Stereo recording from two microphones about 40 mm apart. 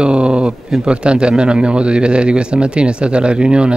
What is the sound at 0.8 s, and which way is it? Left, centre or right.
Speech, right.